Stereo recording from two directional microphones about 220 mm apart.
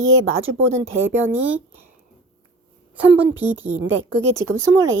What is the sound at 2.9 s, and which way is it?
Speech, 5° right (ahead or behind).